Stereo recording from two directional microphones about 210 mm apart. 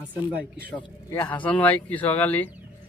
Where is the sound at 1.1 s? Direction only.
10° left (ahead or behind).